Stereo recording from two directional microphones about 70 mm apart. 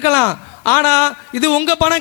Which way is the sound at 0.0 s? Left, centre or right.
Left.